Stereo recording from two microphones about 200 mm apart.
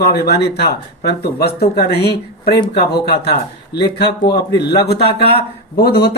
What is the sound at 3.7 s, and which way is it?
Speech, 55° left (ahead or behind).